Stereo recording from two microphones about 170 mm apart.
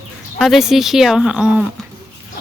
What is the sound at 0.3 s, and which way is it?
Speech, centre (ahead or behind).